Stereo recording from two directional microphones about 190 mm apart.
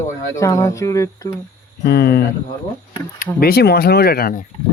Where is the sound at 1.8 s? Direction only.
55° left (ahead or behind).